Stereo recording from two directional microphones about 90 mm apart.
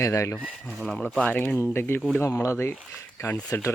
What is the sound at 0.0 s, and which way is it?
Speech, 30° left (ahead or behind).